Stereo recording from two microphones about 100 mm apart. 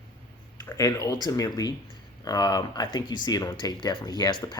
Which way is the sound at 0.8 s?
35° left (ahead or behind).